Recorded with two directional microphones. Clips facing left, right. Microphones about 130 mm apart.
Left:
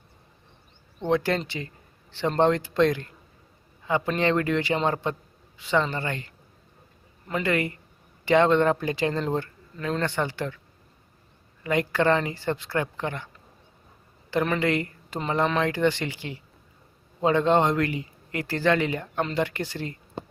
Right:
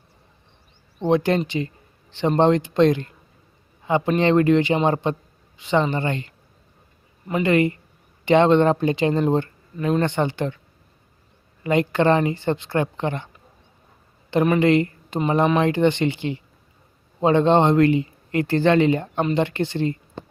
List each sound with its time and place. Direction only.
1.0 s speech: 20° right (ahead or behind)
7.5 s speech: 25° right (ahead or behind)
11.6 s speech: 25° right (ahead or behind)